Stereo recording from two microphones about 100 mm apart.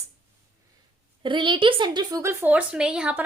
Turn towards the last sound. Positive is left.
turn(degrees=-10)  # may be behind; listen again after turning